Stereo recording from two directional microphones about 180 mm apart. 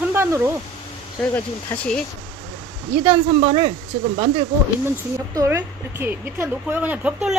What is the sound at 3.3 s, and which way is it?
Speech, 30° right (ahead or behind).